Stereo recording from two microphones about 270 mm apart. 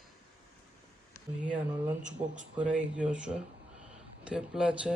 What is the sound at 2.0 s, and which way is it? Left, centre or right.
Speech, right.